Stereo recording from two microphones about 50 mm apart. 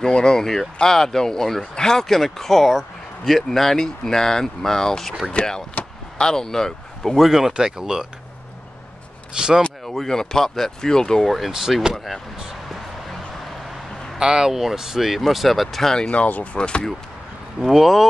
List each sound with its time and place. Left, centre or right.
0.0 s speech: centre
9.3 s speech: centre
9.8 s speech: centre
11.2 s speech: centre
14.1 s speech: centre
16.1 s speech: left
16.5 s speech: centre
17.6 s speech: centre